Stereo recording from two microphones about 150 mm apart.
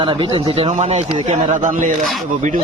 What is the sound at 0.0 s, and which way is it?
A man's voice, 35° right (ahead or behind).